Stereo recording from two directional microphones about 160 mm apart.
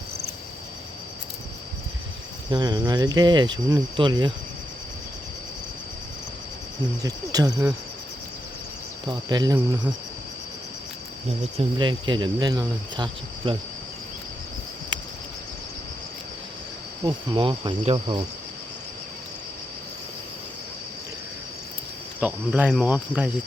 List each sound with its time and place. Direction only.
2.5 s cricket: 25° right (ahead or behind)
7.0 s cricket: 25° right (ahead or behind)
9.0 s cricket: 25° right (ahead or behind)
11.5 s cricket: 30° right (ahead or behind)
17.0 s cricket: 30° right (ahead or behind)
22.2 s speech: 10° right (ahead or behind)